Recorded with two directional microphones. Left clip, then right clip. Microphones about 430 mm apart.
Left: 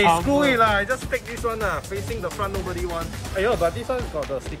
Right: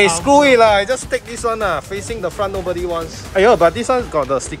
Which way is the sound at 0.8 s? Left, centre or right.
Centre.